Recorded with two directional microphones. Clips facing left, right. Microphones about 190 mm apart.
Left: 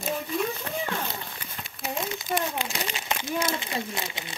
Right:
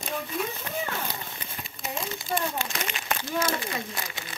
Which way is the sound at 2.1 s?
20° left (ahead or behind).